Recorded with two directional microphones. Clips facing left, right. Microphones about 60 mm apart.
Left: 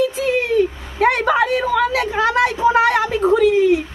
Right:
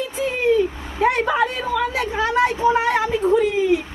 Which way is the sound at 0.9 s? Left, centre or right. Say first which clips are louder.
Left 3 dB; left.